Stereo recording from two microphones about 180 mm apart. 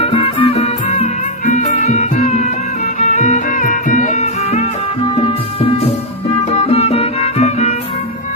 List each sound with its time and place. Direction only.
0.0 s music: 30° left (ahead or behind)